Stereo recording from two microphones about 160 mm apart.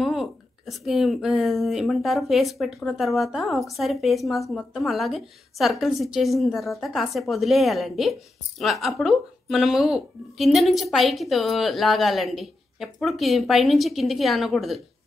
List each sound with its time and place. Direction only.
0.0 s a woman's voice: centre (ahead or behind)